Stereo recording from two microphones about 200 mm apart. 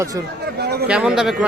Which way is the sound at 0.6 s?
55° right (ahead or behind).